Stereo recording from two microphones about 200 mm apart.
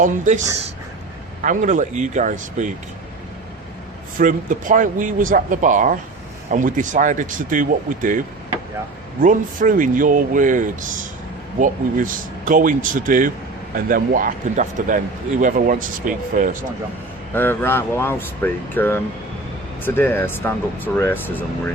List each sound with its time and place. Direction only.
0.0 s speech: 35° right (ahead or behind)
4.2 s speech: 40° right (ahead or behind)
9.2 s a man's voice: 40° right (ahead or behind)
17.3 s speech: 10° left (ahead or behind)